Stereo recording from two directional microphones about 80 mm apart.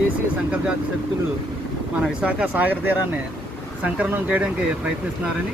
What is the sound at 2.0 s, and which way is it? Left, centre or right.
Speech, centre.